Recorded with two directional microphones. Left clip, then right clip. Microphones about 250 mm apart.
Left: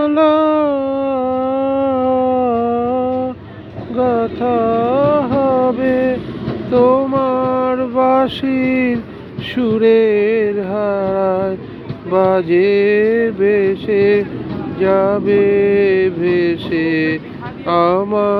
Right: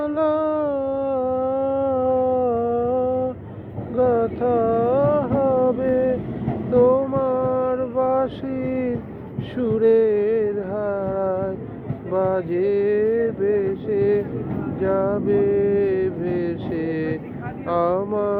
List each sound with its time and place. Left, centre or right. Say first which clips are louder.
0.0 s music: left 8 dB; left
3.9 s a sound: left 3 dB; left
9.6 s music: left 5 dB; left
12.1 s a sound: left 9 dB; left
14.8 s mantra: left 8 dB; left
17.7 s vehicle: left 7 dB; left